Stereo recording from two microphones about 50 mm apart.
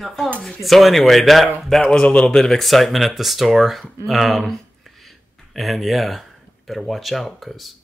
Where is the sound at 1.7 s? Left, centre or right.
Centre.